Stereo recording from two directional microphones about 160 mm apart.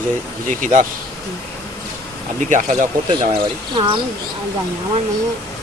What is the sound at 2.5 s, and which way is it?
Speech, 50° right (ahead or behind).